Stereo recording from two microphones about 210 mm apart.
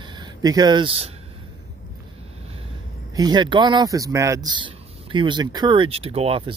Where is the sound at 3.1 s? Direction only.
20° right (ahead or behind).